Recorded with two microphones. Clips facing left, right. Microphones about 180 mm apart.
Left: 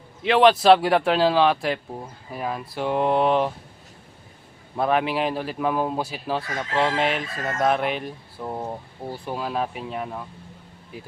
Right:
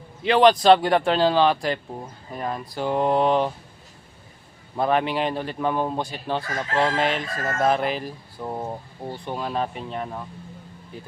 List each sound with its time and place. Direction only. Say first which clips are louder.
0.2 s a man's voice: even; centre (ahead or behind)
4.8 s a man's voice: even; centre (ahead or behind)